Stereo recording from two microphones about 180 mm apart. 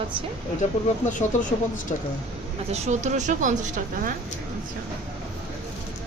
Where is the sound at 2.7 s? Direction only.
40° right (ahead or behind).